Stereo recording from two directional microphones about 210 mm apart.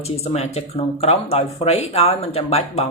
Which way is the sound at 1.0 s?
30° left (ahead or behind).